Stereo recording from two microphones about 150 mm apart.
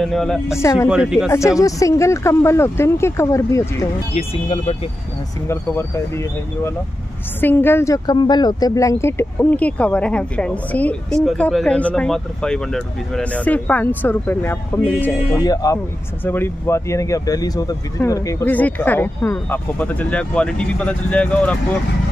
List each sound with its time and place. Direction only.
0.0 s speech: centre (ahead or behind)
0.6 s speech: 20° left (ahead or behind)
0.8 s speech: 5° right (ahead or behind)
1.6 s speech: 20° left (ahead or behind)
4.1 s speech: 45° left (ahead or behind)
5.5 s speech: 15° left (ahead or behind)
15.3 s speech: 25° left (ahead or behind)
18.5 s speech: 10° left (ahead or behind)